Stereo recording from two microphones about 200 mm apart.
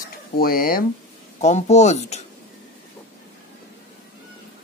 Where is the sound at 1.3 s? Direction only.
35° left (ahead or behind).